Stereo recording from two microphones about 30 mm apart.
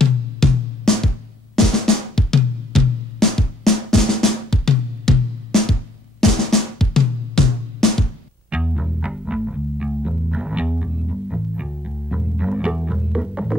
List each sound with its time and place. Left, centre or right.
0.0 s music: centre
6.5 s drum: centre
8.5 s music: right